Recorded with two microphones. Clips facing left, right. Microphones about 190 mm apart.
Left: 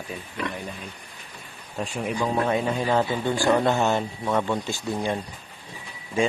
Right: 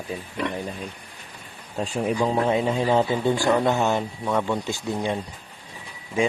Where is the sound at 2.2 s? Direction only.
20° right (ahead or behind).